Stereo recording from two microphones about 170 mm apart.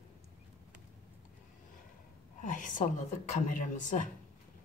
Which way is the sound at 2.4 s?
50° left (ahead or behind).